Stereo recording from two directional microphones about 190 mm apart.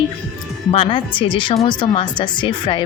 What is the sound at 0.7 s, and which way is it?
Speech, 30° left (ahead or behind).